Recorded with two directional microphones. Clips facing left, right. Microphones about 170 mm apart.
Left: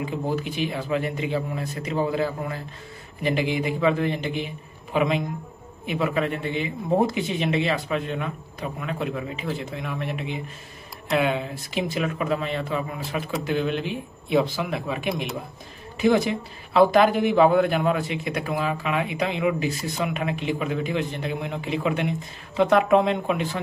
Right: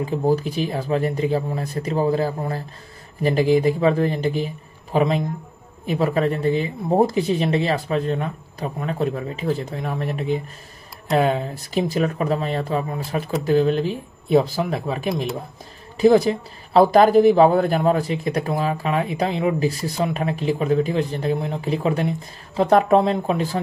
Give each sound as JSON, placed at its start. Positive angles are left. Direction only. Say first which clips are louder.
{"t": 0.0, "sound": "speech", "louder": "right 6 dB", "side_deg": -35}